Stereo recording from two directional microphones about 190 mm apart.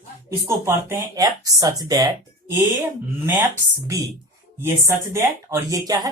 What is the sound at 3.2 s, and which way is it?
Speech, 10° right (ahead or behind).